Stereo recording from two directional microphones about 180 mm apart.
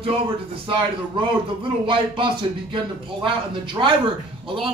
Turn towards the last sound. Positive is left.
turn(degrees=-30)  # may be behind; listen again after turning